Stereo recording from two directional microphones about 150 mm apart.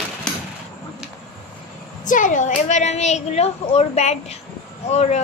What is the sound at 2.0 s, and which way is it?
A woman's voice, 60° left (ahead or behind).